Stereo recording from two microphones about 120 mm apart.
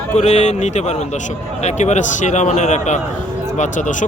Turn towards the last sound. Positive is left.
turn(degrees=90)